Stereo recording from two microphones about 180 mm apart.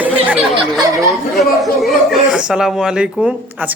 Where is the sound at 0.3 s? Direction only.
Centre (ahead or behind).